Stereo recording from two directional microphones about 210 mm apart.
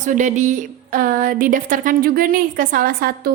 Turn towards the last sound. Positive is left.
turn(degrees=-45)  # may be behind; listen again after turning